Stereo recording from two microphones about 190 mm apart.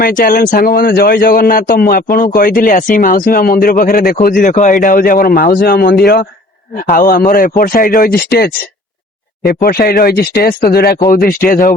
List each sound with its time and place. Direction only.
0.0 s speech: 45° left (ahead or behind)
9.5 s speech: 50° left (ahead or behind)